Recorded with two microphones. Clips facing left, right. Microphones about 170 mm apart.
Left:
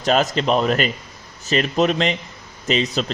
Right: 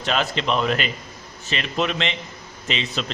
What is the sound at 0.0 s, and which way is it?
A man's voice, 40° left (ahead or behind).